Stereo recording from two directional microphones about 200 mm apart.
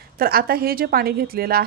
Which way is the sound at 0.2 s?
50° right (ahead or behind).